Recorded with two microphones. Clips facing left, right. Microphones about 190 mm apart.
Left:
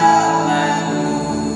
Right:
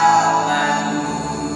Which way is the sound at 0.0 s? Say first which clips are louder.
Left 2 dB; 25° left (ahead or behind).